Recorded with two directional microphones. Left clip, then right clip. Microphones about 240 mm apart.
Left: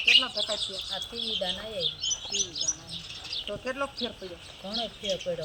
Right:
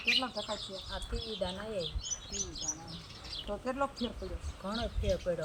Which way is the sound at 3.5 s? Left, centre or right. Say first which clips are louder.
Even; centre.